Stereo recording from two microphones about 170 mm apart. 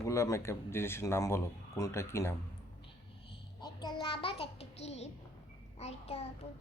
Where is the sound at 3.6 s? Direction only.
25° left (ahead or behind).